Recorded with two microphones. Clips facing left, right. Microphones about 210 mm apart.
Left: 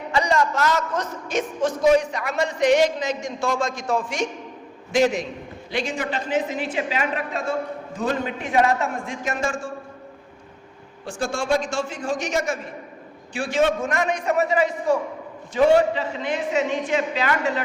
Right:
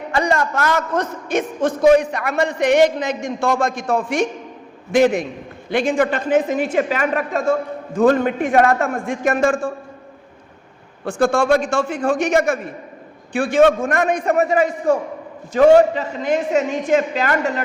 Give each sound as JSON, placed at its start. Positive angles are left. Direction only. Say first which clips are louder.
{"t": 0.1, "sound": "a man's voice", "louder": "right 2 dB", "side_deg": -55}
{"t": 11.0, "sound": "a man's voice", "louder": "right 9 dB", "side_deg": -60}